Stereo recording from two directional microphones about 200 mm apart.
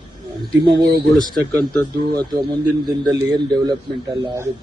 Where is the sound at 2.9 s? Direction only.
20° right (ahead or behind).